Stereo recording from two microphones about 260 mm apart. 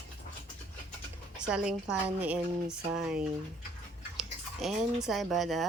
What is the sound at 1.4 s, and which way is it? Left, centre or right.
Speech, centre.